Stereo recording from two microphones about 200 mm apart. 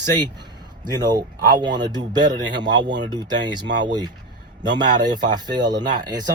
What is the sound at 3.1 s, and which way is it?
Speech, 20° right (ahead or behind).